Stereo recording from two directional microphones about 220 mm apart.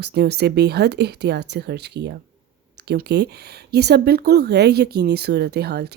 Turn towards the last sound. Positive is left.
turn(degrees=-50)  # may be behind; listen again after turning